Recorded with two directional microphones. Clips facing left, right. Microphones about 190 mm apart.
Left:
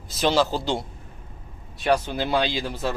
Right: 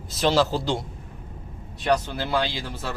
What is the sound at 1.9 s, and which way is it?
Speech, 15° left (ahead or behind).